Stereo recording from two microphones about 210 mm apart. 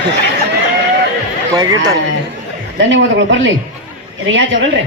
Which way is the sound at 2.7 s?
60° right (ahead or behind).